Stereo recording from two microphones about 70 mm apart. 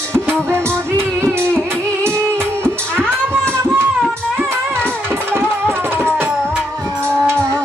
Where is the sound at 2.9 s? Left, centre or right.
Right.